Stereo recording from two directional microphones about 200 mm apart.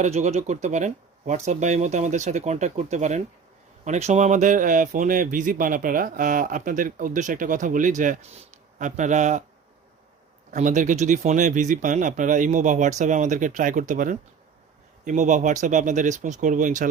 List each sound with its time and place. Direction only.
0.0 s speech: 35° right (ahead or behind)
10.5 s speech: 40° right (ahead or behind)